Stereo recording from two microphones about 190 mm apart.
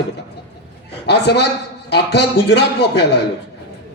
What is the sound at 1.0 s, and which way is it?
A man's voice, 60° left (ahead or behind).